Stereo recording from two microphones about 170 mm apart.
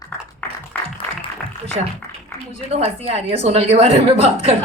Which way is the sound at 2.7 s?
35° right (ahead or behind).